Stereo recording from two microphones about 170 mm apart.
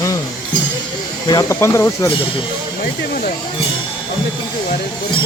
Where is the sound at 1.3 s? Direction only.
20° left (ahead or behind).